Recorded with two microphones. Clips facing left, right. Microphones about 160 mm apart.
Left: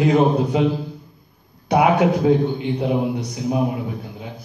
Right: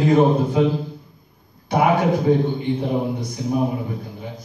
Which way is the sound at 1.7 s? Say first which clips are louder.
Left 2 dB; 75° left (ahead or behind).